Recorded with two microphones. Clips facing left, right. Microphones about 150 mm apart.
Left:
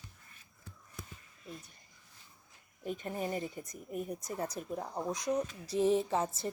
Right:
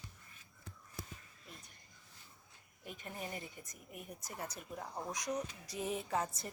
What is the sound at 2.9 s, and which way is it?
A woman's voice, 40° left (ahead or behind).